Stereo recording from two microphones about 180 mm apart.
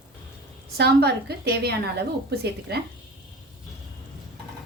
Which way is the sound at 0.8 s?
65° right (ahead or behind).